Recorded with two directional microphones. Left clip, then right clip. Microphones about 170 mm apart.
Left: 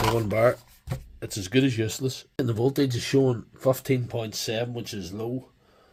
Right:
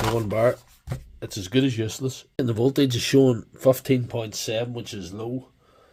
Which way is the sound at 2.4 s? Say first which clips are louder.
Right 3 dB; 20° right (ahead or behind).